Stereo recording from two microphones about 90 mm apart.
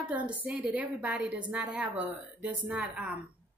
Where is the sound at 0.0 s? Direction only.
15° right (ahead or behind).